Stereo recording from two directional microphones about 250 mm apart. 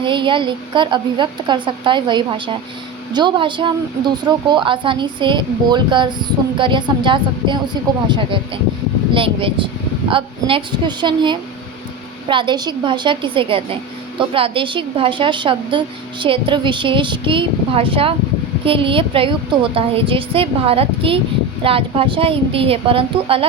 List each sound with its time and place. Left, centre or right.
0.0 s speech: centre